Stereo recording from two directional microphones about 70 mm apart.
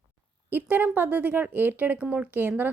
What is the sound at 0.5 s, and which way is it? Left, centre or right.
Speech, right.